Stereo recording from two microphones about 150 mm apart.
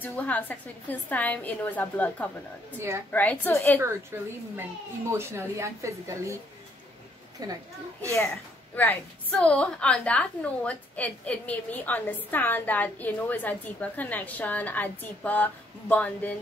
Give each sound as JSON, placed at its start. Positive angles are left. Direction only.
{"t": 0.0, "sound": "a woman's voice", "side_deg": 10}
{"t": 3.8, "sound": "speech", "side_deg": -15}
{"t": 7.4, "sound": "speech", "side_deg": -25}
{"t": 8.7, "sound": "a woman's voice", "side_deg": 10}